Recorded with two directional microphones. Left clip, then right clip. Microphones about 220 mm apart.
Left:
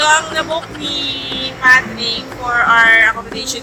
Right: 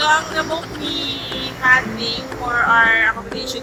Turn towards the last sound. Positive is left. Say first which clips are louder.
# left 3 dB
turn(degrees=20)  # may be behind; listen again after turning